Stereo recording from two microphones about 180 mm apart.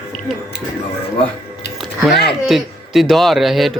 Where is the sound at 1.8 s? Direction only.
Centre (ahead or behind).